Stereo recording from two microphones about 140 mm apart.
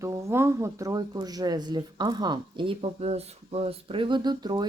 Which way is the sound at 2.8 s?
50° right (ahead or behind).